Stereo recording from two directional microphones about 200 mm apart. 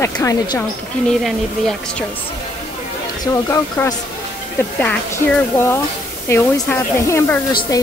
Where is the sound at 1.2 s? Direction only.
Centre (ahead or behind).